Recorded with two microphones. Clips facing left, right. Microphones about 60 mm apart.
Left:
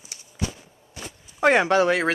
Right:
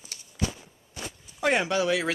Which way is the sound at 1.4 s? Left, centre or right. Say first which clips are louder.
Left 6 dB; left.